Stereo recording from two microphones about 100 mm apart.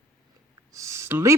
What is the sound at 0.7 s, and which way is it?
Speech, 30° right (ahead or behind).